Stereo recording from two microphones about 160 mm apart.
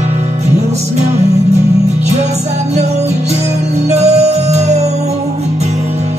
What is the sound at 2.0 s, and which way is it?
Music, 45° right (ahead or behind).